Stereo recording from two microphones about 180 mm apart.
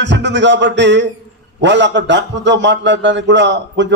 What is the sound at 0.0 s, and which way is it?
A man's voice, 75° right (ahead or behind).